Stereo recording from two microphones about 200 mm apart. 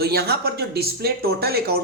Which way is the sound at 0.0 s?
55° right (ahead or behind).